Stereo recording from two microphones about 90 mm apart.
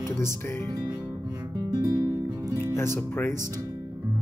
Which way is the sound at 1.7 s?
45° right (ahead or behind).